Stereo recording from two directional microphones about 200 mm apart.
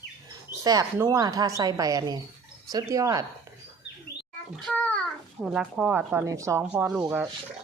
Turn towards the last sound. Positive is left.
turn(degrees=-10)  # may be behind; listen again after turning